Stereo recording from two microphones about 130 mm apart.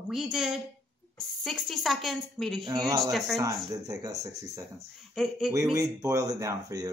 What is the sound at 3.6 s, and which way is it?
Speech, 25° right (ahead or behind).